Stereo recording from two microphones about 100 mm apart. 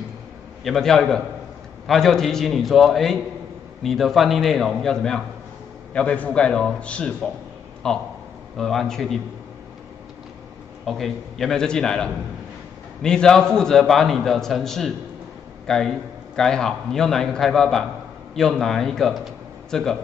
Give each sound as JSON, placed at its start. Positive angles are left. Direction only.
{"t": 0.7, "sound": "a man's voice", "side_deg": 5}
{"t": 10.9, "sound": "a man's voice", "side_deg": 0}